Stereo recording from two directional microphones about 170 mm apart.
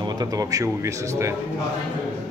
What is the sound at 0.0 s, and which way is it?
Speech, 25° right (ahead or behind).